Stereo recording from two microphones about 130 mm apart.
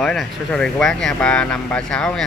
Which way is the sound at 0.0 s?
5° left (ahead or behind).